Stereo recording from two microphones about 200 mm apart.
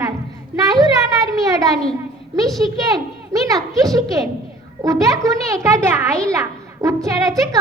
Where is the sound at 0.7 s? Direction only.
20° right (ahead or behind).